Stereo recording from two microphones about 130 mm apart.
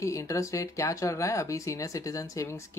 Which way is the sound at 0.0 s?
25° left (ahead or behind).